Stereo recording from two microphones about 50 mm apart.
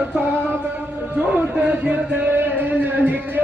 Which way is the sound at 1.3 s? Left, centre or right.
Right.